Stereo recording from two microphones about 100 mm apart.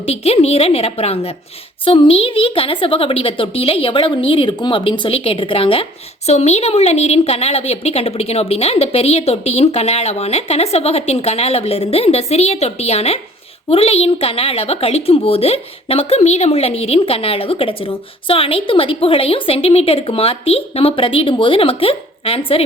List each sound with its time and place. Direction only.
0.0 s a woman's voice: 90° left
1.8 s a woman's voice: 60° left (ahead or behind)
6.2 s a woman's voice: 90° left; by 22.6 s 75° left (ahead or behind)